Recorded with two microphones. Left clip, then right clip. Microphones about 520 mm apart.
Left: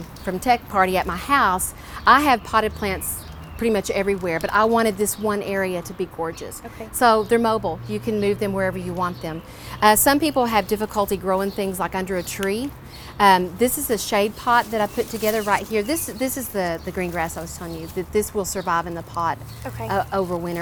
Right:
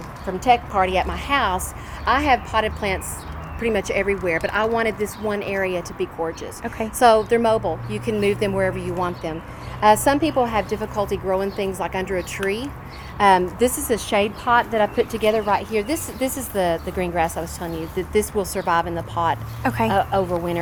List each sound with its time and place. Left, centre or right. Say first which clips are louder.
0.3 s speech: right 2 dB; left
0.9 s a woman's voice: left 1 dB; left
2.0 s a woman's voice: left 3 dB; left
19.6 s speech: right 11 dB; right
19.9 s speech: left 1 dB; left